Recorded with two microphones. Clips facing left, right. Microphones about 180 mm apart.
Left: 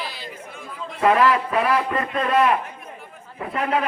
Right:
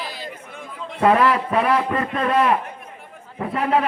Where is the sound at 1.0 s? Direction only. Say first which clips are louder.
Right 1 dB; 30° right (ahead or behind).